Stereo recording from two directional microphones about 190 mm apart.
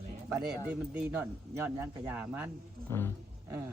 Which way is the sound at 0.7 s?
10° right (ahead or behind).